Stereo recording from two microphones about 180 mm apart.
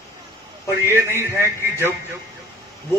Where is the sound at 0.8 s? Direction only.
15° right (ahead or behind).